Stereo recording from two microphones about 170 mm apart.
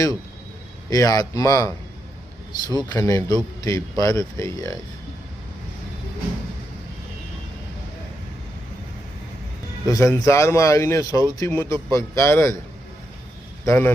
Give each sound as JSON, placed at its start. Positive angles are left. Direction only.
{"t": 0.9, "sound": "speech", "side_deg": 20}
{"t": 2.9, "sound": "a man's voice", "side_deg": 15}
{"t": 9.8, "sound": "a man's voice", "side_deg": 20}
{"t": 13.7, "sound": "a man's voice", "side_deg": 10}